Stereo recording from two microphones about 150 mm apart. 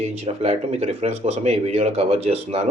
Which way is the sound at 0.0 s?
45° right (ahead or behind).